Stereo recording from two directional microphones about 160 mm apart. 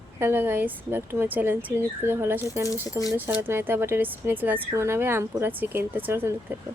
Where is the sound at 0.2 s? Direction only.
15° right (ahead or behind).